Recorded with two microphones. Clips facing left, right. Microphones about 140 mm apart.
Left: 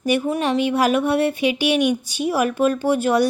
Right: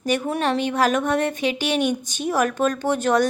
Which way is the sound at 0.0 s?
10° left (ahead or behind).